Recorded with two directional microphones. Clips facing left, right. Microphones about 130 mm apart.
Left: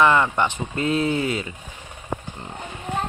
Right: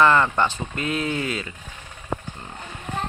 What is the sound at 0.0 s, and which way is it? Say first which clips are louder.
Speech: even; 15° left (ahead or behind).